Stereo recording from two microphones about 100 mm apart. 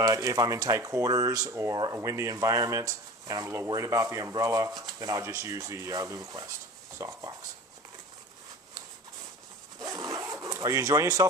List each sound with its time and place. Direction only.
0.0 s speech: 35° right (ahead or behind)
1.7 s speech: 45° right (ahead or behind)
2.0 s speech: 30° right (ahead or behind)
9.8 s dog: 35° right (ahead or behind)
10.4 s speech: 35° right (ahead or behind)